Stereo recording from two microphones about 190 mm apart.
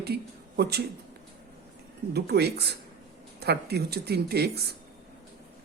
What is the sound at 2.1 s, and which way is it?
Speech, 60° right (ahead or behind).